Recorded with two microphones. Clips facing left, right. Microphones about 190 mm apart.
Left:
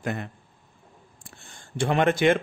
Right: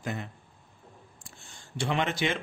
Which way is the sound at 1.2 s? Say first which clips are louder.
Left 6 dB; 55° left (ahead or behind).